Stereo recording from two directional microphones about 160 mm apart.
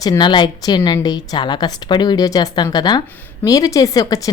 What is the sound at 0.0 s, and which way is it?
A woman's voice, 25° left (ahead or behind).